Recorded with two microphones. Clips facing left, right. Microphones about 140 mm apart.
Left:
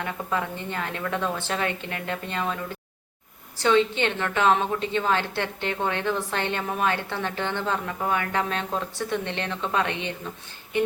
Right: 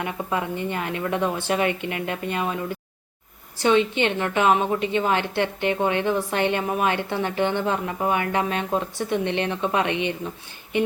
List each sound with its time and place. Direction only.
0.0 s a woman's voice: 15° right (ahead or behind)
3.6 s a woman's voice: 15° right (ahead or behind)